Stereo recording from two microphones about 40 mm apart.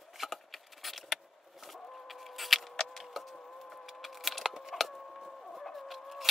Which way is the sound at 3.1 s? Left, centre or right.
Centre.